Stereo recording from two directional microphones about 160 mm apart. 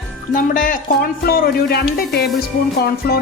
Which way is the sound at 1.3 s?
70° left (ahead or behind).